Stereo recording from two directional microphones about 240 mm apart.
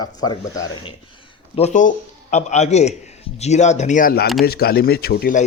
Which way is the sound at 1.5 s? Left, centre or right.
Left.